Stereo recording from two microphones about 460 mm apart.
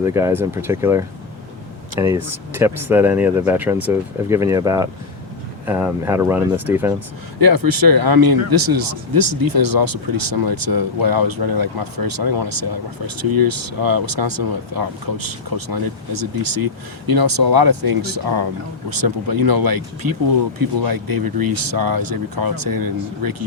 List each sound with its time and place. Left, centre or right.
0.0 s speech: centre
7.3 s speech: right